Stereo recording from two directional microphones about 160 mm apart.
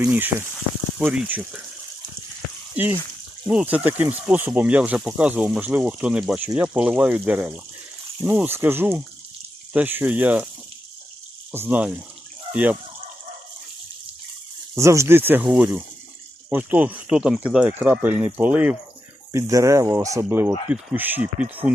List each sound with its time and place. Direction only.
0.0 s speech: 10° right (ahead or behind)
2.7 s speech: 10° right (ahead or behind)
11.5 s speech: 10° right (ahead or behind)
14.8 s speech: 20° right (ahead or behind)